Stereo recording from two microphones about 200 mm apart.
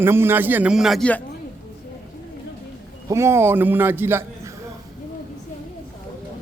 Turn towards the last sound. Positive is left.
turn(degrees=-10)  # may be behind; listen again after turning